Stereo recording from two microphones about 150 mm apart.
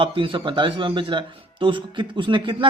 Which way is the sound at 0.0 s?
35° right (ahead or behind).